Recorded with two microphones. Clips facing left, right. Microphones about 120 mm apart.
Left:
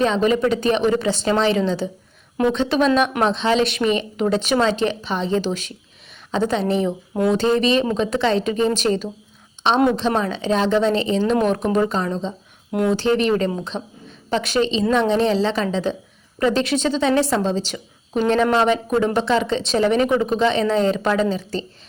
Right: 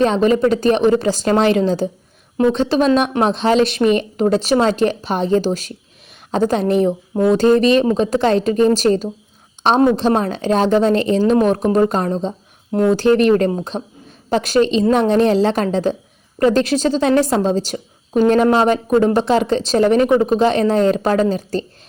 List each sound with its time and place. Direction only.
0.0 s a woman's voice: 40° right (ahead or behind)
13.7 s a woman's voice: 5° right (ahead or behind)
14.3 s a woman's voice: 40° right (ahead or behind)